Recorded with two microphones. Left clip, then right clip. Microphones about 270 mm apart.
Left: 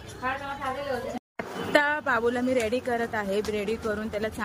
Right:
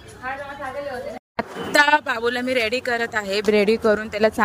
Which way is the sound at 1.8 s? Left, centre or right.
Right.